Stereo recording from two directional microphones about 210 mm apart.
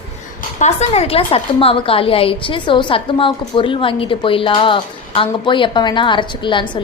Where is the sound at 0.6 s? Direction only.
30° left (ahead or behind).